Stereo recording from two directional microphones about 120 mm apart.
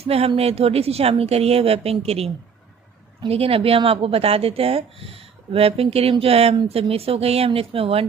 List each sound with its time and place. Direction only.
0.0 s a woman's voice: 55° right (ahead or behind)